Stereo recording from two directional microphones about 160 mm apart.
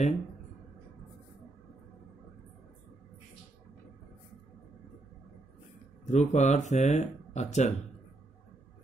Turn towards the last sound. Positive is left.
turn(degrees=45)  # may be behind; listen again after turning